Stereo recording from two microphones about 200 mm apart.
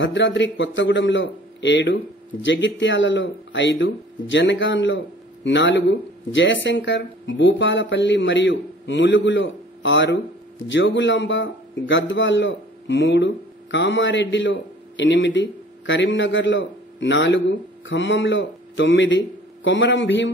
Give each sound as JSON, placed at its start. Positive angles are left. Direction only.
{"t": 0.0, "sound": "a man's voice", "side_deg": 70}